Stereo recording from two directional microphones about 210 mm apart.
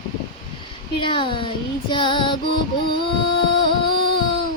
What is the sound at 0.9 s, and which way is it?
Speech, 25° left (ahead or behind).